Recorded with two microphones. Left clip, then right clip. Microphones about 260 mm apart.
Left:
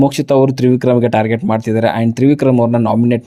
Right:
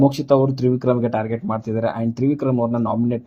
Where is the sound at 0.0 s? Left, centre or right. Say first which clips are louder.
Left 5 dB; left.